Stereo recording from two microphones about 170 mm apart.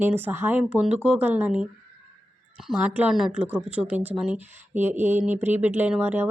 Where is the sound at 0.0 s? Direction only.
10° right (ahead or behind).